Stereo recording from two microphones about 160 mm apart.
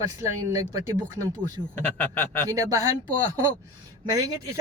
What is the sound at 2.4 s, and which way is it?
Speech, 20° right (ahead or behind).